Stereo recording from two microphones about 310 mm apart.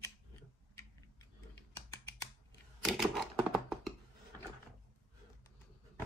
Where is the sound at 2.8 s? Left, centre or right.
Centre.